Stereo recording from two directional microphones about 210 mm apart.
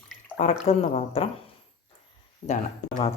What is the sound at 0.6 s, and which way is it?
Speech, 30° left (ahead or behind).